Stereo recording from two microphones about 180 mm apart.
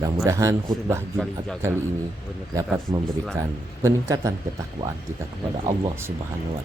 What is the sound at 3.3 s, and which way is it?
Speech, 15° right (ahead or behind).